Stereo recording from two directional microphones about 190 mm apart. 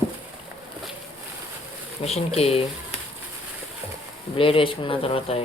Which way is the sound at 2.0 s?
30° left (ahead or behind).